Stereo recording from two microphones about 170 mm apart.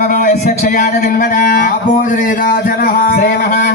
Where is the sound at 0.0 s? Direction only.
50° left (ahead or behind).